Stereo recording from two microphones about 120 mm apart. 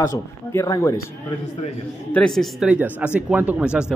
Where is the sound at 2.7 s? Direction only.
15° right (ahead or behind).